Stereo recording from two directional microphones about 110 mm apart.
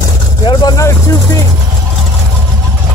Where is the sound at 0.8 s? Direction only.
25° left (ahead or behind).